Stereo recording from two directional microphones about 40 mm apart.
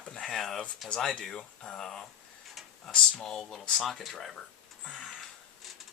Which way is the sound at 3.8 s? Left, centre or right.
Centre.